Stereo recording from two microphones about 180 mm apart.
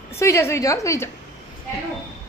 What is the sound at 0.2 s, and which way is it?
Speech, 15° left (ahead or behind).